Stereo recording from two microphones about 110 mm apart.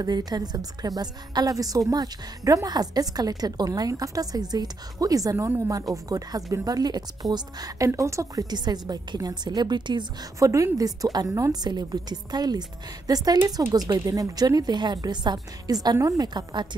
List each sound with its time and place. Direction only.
0.0 s a woman's voice: 40° right (ahead or behind)
10.4 s a woman's voice: 30° right (ahead or behind)